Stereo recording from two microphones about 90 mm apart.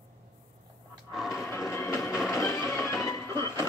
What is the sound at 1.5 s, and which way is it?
Train, 30° left (ahead or behind).